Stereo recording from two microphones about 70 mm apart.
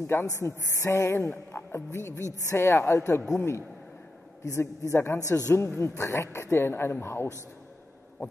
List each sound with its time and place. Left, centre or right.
0.0 s speech: left